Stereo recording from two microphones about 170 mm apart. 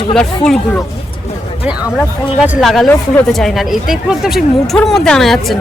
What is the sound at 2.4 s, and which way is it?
A woman's voice, centre (ahead or behind).